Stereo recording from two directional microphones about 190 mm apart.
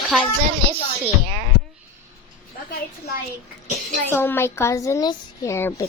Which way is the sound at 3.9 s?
10° left (ahead or behind).